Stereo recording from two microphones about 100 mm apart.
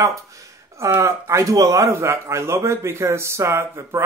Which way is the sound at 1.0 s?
30° right (ahead or behind).